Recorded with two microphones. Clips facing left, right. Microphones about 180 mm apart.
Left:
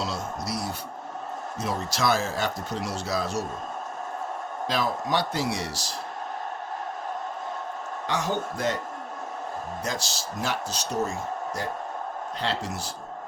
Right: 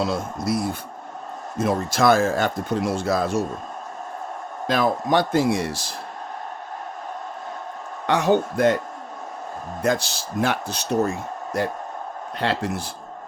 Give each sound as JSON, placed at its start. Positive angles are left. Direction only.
{"t": 0.0, "sound": "speech", "side_deg": -55}
{"t": 4.6, "sound": "speech", "side_deg": -55}
{"t": 8.0, "sound": "speech", "side_deg": -60}
{"t": 9.8, "sound": "speech", "side_deg": -55}